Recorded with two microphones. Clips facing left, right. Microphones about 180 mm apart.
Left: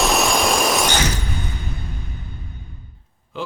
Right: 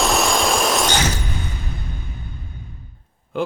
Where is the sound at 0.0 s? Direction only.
Centre (ahead or behind).